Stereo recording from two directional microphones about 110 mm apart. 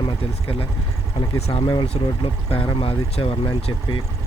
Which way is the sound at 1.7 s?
50° left (ahead or behind).